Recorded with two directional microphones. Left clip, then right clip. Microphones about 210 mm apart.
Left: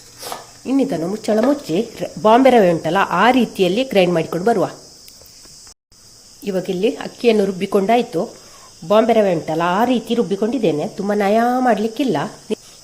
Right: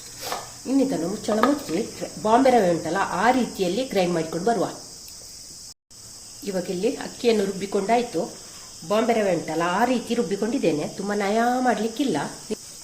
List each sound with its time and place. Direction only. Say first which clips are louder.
0.8 s speech: left 4 dB; 40° left (ahead or behind)
6.4 s speech: left 6 dB; 45° left (ahead or behind)